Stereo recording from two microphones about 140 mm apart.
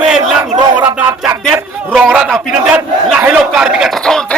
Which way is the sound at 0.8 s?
10° right (ahead or behind).